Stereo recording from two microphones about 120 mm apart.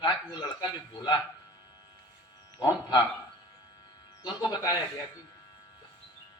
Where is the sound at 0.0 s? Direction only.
35° left (ahead or behind).